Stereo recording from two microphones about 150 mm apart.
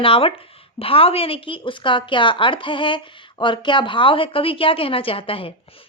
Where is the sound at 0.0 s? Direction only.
40° left (ahead or behind).